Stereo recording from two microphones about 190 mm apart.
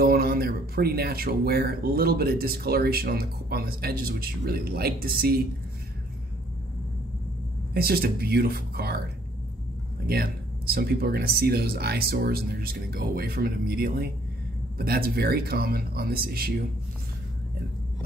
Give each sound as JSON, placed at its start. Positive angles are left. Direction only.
{"t": 0.0, "sound": "speech", "side_deg": -50}
{"t": 7.7, "sound": "speech", "side_deg": -55}
{"t": 10.0, "sound": "speech", "side_deg": -55}